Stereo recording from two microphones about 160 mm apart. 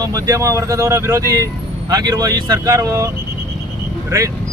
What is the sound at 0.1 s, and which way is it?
Speech, 20° right (ahead or behind).